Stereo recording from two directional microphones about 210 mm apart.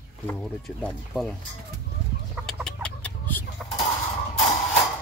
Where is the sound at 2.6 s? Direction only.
5° left (ahead or behind).